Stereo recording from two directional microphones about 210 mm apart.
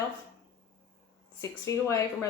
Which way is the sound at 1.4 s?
15° left (ahead or behind).